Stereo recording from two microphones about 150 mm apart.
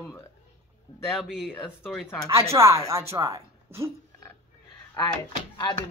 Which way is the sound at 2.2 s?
20° right (ahead or behind).